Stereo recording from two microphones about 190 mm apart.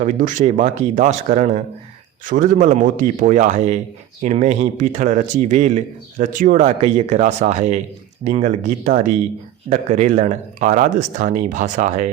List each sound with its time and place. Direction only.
0.0 s speech: 40° right (ahead or behind)